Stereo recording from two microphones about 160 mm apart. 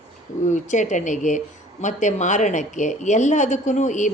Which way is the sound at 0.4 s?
50° left (ahead or behind).